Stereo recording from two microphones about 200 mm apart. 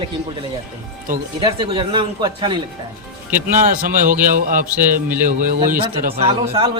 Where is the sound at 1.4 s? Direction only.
25° right (ahead or behind).